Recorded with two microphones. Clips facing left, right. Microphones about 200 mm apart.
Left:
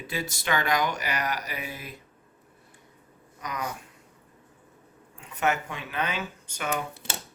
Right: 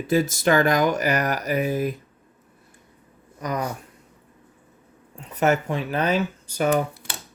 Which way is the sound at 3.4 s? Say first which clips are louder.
Right 7 dB; 40° right (ahead or behind).